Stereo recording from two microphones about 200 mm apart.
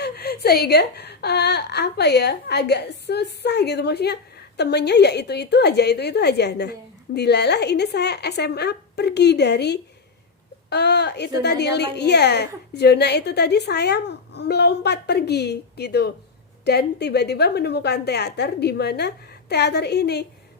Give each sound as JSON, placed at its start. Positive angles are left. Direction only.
{"t": 0.0, "sound": "a woman's voice", "side_deg": 55}